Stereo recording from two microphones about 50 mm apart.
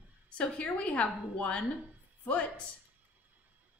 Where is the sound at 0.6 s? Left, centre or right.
Left.